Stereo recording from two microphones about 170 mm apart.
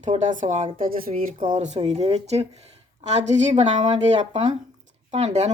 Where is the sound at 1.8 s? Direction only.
35° right (ahead or behind).